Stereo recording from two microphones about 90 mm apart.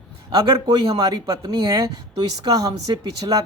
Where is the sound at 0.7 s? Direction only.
45° right (ahead or behind).